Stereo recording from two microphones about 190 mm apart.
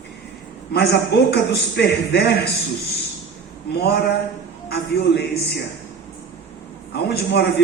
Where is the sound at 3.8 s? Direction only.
60° left (ahead or behind).